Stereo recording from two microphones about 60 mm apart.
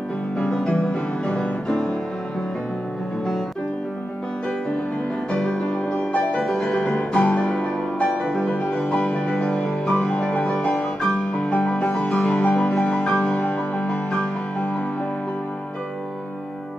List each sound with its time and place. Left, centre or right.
0.4 s music: centre
5.3 s music: centre
13.3 s music: centre